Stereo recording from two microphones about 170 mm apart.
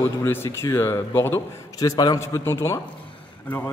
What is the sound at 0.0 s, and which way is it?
Mantra, 15° left (ahead or behind).